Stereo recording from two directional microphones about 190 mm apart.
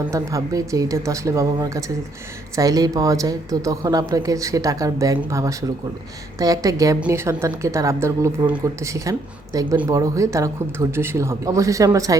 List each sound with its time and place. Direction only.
0.1 s speech: 15° right (ahead or behind)